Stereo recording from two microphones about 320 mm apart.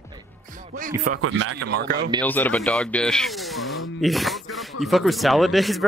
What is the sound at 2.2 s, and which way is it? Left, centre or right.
Speech, centre.